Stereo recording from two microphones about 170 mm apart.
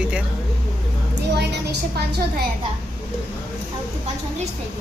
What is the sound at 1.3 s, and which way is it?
Speech, 75° right (ahead or behind).